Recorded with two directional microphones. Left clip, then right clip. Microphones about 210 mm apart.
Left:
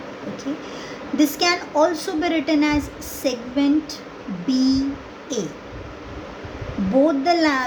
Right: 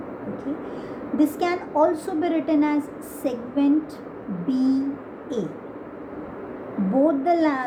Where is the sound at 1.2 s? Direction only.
40° left (ahead or behind).